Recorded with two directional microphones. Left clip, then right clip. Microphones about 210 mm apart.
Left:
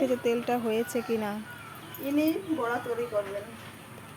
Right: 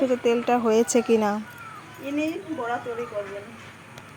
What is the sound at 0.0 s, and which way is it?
Speech, 10° right (ahead or behind).